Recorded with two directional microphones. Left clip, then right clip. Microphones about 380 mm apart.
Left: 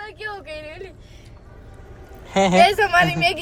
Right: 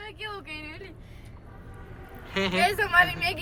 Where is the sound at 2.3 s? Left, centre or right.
Centre.